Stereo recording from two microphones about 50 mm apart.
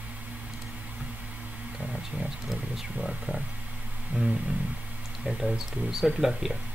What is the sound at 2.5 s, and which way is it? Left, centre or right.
Speech, centre.